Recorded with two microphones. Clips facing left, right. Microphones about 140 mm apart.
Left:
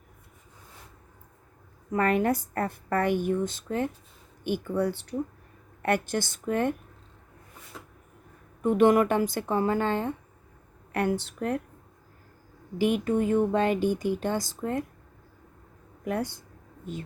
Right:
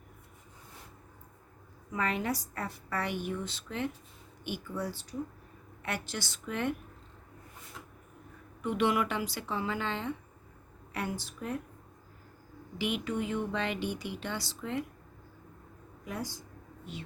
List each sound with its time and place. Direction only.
1.9 s a woman's voice: 50° left (ahead or behind)
8.6 s a woman's voice: 45° left (ahead or behind)
10.9 s speech: 60° left (ahead or behind)
12.8 s a woman's voice: 45° left (ahead or behind)
16.0 s speech: 60° left (ahead or behind)